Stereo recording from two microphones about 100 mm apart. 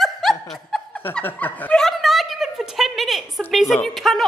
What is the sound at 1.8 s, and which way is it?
A woman's voice, centre (ahead or behind).